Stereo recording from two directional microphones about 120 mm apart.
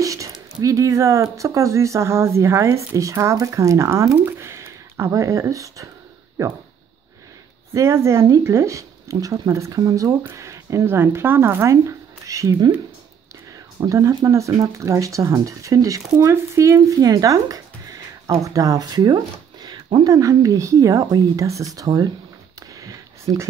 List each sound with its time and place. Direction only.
0.0 s speech: 30° right (ahead or behind)
7.7 s speech: 20° right (ahead or behind)
13.7 s speech: 25° right (ahead or behind)
22.6 s a sound: 30° right (ahead or behind)